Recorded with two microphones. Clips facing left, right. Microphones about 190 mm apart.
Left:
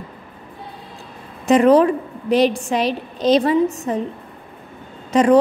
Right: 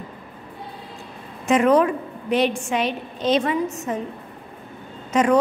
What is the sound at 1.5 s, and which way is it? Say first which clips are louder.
A woman's voice: left 4 dB; 35° left (ahead or behind).